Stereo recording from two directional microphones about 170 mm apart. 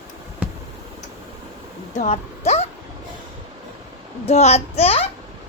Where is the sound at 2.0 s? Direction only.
40° left (ahead or behind).